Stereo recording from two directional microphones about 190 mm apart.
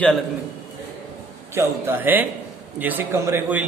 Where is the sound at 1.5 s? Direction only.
10° right (ahead or behind).